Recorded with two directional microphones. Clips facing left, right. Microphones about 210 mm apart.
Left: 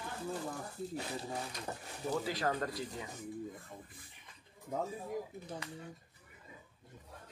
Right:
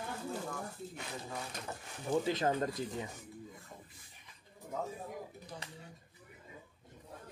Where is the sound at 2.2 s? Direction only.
20° right (ahead or behind).